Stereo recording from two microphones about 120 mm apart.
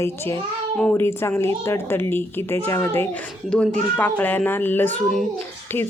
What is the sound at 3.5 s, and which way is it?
A child's voice, 10° left (ahead or behind).